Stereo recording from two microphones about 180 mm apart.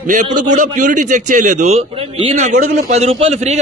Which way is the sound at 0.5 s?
45° right (ahead or behind).